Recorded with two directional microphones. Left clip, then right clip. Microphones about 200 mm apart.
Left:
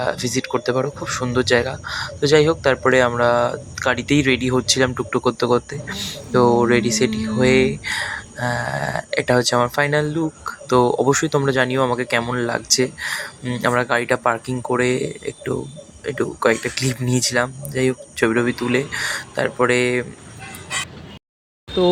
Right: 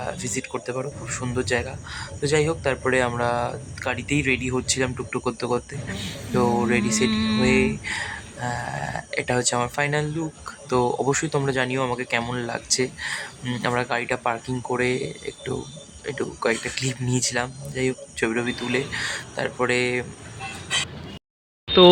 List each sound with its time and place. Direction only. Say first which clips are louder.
0.0 s speech: left 8 dB; 20° left (ahead or behind)